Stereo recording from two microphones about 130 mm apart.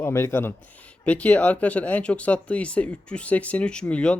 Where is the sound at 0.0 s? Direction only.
20° left (ahead or behind).